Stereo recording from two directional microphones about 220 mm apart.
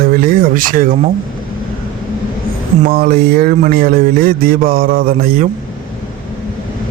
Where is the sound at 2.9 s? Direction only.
40° right (ahead or behind).